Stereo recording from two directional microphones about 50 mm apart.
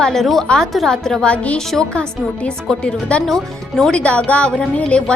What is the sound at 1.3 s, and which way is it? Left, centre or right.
Speech, left.